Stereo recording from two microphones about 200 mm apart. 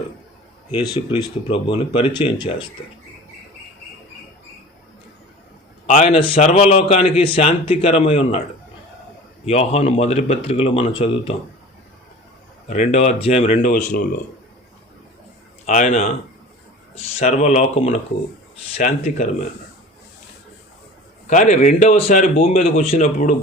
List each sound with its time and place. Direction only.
0.7 s speech: 25° left (ahead or behind)
5.8 s a man's voice: 35° left (ahead or behind)
9.5 s speech: 30° left (ahead or behind)
12.6 s a man's voice: 35° left (ahead or behind)
13.7 s a man's voice: 40° left (ahead or behind)
15.6 s a man's voice: 35° left (ahead or behind)
17.2 s a man's voice: 35° left (ahead or behind)
21.2 s a man's voice: 35° left (ahead or behind)